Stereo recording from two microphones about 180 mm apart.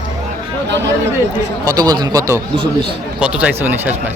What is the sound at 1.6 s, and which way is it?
A man's voice, 20° right (ahead or behind).